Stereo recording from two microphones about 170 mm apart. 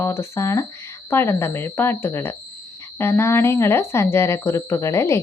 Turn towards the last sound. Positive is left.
turn(degrees=15)  # may be behind; listen again after turning